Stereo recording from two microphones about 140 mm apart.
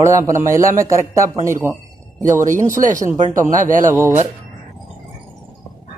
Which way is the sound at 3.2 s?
65° right (ahead or behind).